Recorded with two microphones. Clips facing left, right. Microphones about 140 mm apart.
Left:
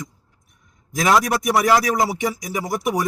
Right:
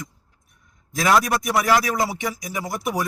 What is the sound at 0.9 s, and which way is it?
A man's voice, 20° left (ahead or behind).